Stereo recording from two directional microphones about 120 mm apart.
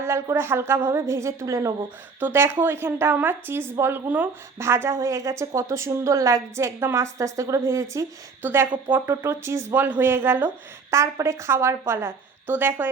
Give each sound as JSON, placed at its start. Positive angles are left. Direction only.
{"t": 0.0, "sound": "speech", "side_deg": -25}